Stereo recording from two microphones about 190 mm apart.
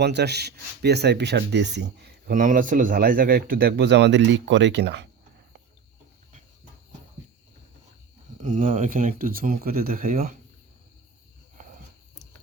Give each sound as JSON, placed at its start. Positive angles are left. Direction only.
{"t": 0.0, "sound": "speech", "side_deg": -60}
{"t": 8.4, "sound": "speech", "side_deg": -40}